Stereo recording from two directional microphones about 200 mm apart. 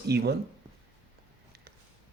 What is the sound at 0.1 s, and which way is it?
Speech, 55° right (ahead or behind).